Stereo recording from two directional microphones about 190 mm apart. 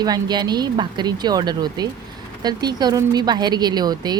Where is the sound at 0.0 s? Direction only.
20° right (ahead or behind).